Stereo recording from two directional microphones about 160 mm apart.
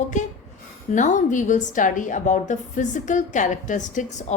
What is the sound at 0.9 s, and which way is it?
A woman's voice, 50° left (ahead or behind).